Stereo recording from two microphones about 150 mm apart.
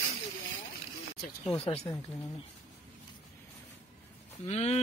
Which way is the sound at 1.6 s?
40° left (ahead or behind).